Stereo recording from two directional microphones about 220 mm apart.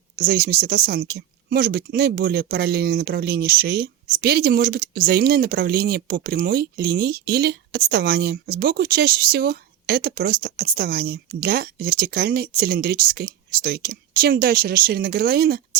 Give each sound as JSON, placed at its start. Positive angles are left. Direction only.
{"t": 0.2, "sound": "speech", "side_deg": -45}